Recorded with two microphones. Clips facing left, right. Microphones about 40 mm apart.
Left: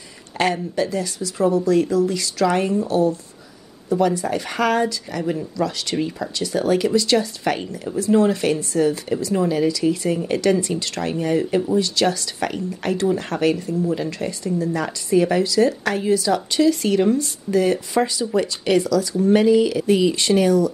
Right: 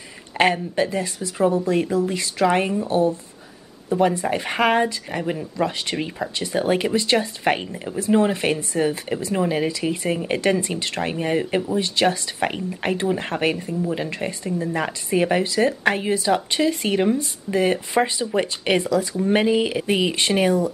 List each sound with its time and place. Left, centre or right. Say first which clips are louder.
0.4 s speech: right 1 dB; right